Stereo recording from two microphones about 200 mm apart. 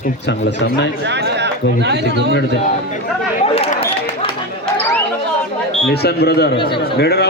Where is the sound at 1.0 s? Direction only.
60° right (ahead or behind).